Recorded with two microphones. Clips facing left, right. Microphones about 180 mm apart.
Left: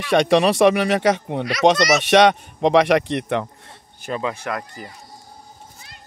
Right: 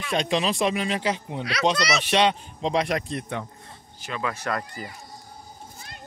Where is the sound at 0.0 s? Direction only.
80° left.